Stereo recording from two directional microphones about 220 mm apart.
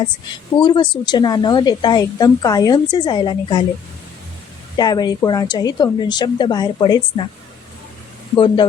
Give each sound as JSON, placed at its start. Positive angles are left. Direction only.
{"t": 0.6, "sound": "a woman's voice", "side_deg": 20}
{"t": 4.8, "sound": "a woman's voice", "side_deg": 20}
{"t": 8.4, "sound": "a woman's voice", "side_deg": 20}